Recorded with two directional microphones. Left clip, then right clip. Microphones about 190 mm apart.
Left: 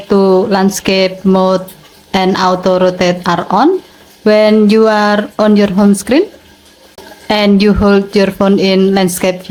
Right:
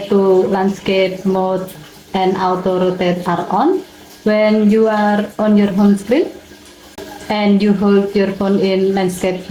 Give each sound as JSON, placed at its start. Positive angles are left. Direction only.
{"t": 0.1, "sound": "speech", "side_deg": 40}
{"t": 7.3, "sound": "speech", "side_deg": 35}